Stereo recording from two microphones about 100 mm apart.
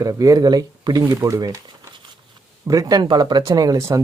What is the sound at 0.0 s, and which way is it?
Speech, 35° right (ahead or behind).